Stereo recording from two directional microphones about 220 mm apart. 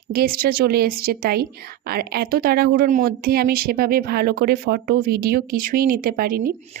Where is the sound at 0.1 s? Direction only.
45° right (ahead or behind).